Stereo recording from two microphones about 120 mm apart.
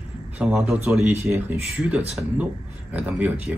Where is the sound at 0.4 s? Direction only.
5° right (ahead or behind).